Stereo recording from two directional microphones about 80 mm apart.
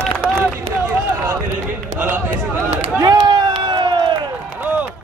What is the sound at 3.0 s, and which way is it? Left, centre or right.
Crowd, right.